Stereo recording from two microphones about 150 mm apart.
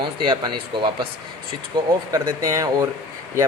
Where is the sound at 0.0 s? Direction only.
35° right (ahead or behind).